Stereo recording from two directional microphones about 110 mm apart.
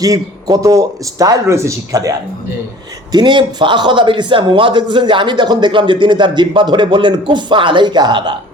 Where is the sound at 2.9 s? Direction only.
40° right (ahead or behind).